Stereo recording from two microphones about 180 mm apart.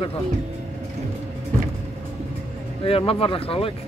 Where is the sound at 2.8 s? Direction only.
30° left (ahead or behind).